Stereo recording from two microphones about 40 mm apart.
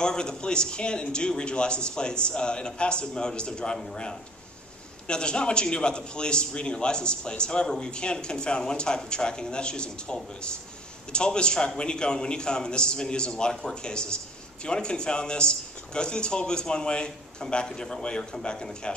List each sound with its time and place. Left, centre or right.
0.0 s a man's voice: centre